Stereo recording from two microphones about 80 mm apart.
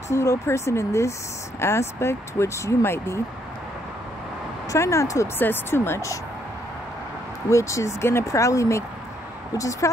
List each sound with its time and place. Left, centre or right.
0.1 s speech: left
4.6 s speech: left
5.4 s speech: left
7.4 s a woman's voice: left